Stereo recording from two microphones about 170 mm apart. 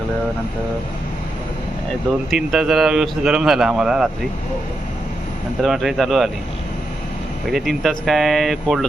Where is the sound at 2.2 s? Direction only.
5° right (ahead or behind).